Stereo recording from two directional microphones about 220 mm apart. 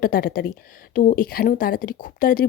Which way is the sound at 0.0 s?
40° left (ahead or behind).